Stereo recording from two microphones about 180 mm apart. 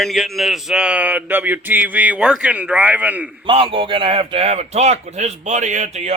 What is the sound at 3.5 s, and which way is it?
A man's voice, 30° right (ahead or behind).